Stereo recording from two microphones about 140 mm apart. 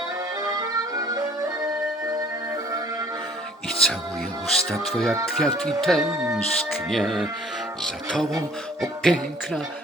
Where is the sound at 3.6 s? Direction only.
5° left (ahead or behind).